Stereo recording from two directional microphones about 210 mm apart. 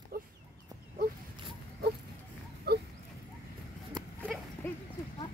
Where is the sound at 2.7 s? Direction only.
50° right (ahead or behind).